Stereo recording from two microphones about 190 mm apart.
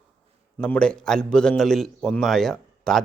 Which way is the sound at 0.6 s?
5° left (ahead or behind).